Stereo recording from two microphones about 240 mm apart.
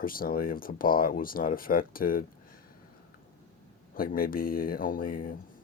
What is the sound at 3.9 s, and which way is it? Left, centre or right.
Speech, left.